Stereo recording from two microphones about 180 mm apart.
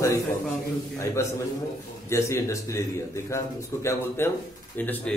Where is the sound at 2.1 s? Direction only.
15° left (ahead or behind).